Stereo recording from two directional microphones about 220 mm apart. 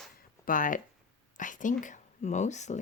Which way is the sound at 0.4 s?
35° left (ahead or behind).